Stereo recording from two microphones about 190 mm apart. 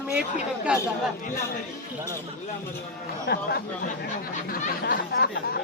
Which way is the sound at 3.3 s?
60° left (ahead or behind).